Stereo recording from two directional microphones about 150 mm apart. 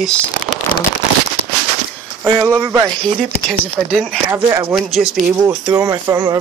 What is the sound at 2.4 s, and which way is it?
Speech, 20° right (ahead or behind).